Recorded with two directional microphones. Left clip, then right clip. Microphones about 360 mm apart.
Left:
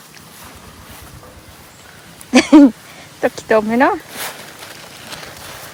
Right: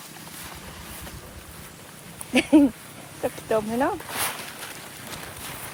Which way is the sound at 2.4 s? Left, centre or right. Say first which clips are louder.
Left 10 dB; left.